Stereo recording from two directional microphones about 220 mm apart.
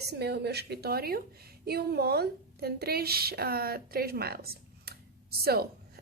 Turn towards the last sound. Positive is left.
turn(degrees=-45)  # may be behind; listen again after turning